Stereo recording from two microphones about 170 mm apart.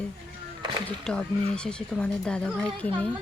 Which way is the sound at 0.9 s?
5° left (ahead or behind).